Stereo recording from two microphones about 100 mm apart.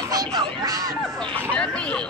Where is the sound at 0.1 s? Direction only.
40° right (ahead or behind).